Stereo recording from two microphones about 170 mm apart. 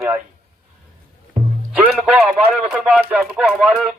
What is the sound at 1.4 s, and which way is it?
Music, 45° right (ahead or behind).